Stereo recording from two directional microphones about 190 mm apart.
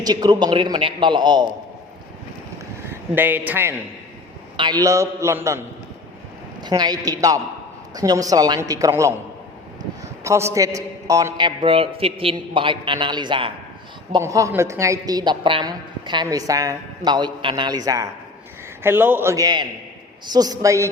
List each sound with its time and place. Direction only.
0.0 s a woman's voice: 20° right (ahead or behind)
3.2 s a man's voice: 10° right (ahead or behind)
4.5 s a man's voice: 20° right (ahead or behind)
10.2 s a woman's voice: 15° right (ahead or behind)